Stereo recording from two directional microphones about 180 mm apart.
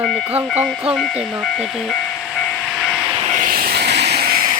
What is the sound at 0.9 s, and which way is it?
Speech, centre (ahead or behind).